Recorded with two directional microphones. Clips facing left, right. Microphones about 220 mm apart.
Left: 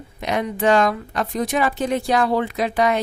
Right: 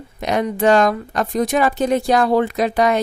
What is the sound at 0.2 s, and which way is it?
Speech, 40° right (ahead or behind).